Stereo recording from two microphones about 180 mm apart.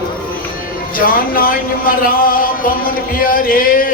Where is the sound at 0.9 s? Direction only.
50° left (ahead or behind).